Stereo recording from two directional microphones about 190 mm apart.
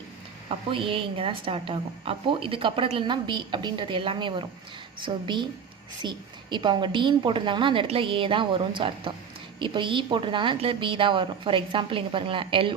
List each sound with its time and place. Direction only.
0.4 s a woman's voice: 25° right (ahead or behind)